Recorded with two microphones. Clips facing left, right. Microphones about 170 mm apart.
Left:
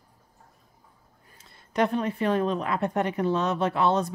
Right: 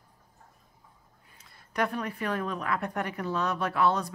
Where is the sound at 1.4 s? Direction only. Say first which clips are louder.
Left 5 dB; 25° left (ahead or behind).